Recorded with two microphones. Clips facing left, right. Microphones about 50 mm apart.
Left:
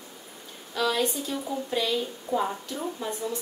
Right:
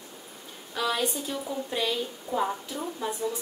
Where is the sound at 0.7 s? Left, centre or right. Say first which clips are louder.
Left 2 dB; centre.